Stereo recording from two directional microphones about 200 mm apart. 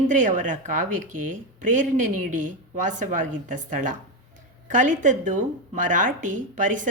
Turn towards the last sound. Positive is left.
turn(degrees=-40)  # may be behind; listen again after turning